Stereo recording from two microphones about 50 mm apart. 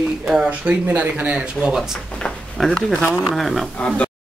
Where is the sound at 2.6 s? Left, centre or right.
Centre.